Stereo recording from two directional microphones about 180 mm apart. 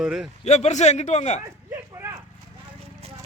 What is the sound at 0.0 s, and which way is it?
Speech, 5° right (ahead or behind).